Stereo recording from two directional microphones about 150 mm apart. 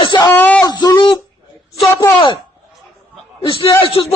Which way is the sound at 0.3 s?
10° left (ahead or behind).